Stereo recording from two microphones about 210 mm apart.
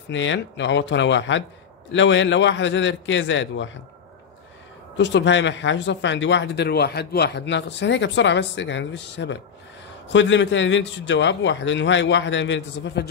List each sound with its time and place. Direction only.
0.1 s speech: 60° left (ahead or behind)
4.9 s speech: 60° left (ahead or behind)